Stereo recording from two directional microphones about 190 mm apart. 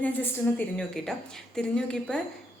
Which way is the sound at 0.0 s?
10° left (ahead or behind).